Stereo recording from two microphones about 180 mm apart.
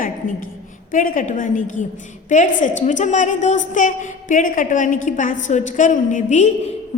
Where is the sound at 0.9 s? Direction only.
50° left (ahead or behind).